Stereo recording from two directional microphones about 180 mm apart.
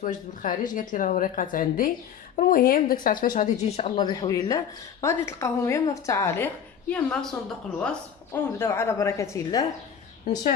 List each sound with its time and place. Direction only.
0.0 s speech: 50° left (ahead or behind)
3.3 s a woman's voice: 40° left (ahead or behind); by 7.3 s 5° left (ahead or behind)
8.3 s a woman's voice: 15° left (ahead or behind)